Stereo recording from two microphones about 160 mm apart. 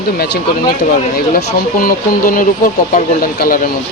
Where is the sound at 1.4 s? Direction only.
60° left (ahead or behind).